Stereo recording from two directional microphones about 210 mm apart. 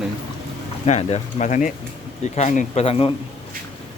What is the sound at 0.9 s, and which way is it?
Speech, 30° left (ahead or behind).